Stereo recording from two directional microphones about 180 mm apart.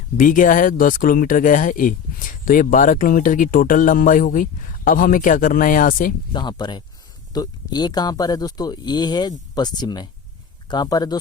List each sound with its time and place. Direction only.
0.2 s speech: 50° left (ahead or behind)
6.3 s speech: 25° left (ahead or behind)